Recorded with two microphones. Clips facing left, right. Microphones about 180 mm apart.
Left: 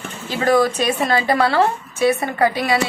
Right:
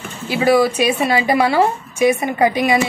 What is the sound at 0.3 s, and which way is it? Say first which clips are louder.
A woman's voice: right 2 dB; 10° right (ahead or behind).